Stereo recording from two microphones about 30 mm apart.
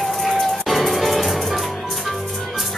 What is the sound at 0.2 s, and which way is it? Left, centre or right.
Music, centre.